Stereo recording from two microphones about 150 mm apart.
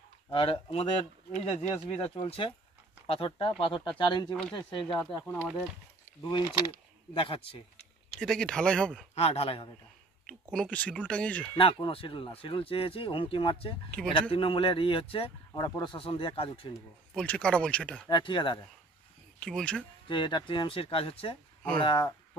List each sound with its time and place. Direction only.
0.3 s speech: 35° left (ahead or behind)
4.3 s speech: 5° left (ahead or behind)
4.6 s speech: 35° left (ahead or behind)
5.2 s speech: 15° left (ahead or behind)
8.2 s speech: 5° left (ahead or behind)
9.1 s speech: 45° left (ahead or behind)
10.2 s speech: 5° left (ahead or behind)
11.5 s speech: 35° left (ahead or behind)
13.8 s speech: 10° left (ahead or behind)
14.3 s speech: 35° left (ahead or behind)
17.1 s speech: 5° left (ahead or behind)
18.0 s speech: 30° left (ahead or behind)
19.4 s speech: 5° left (ahead or behind)
20.1 s speech: 30° left (ahead or behind)